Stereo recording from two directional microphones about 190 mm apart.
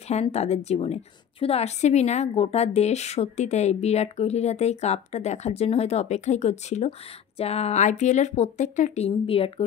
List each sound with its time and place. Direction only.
0.1 s a woman's voice: 35° left (ahead or behind)